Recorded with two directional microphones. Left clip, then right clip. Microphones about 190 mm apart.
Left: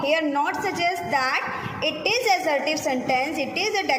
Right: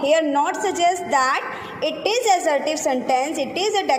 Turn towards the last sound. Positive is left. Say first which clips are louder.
# right 3 dB
turn(degrees=-20)  # may be behind; listen again after turning